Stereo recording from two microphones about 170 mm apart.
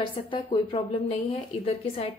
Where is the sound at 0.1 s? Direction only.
30° left (ahead or behind).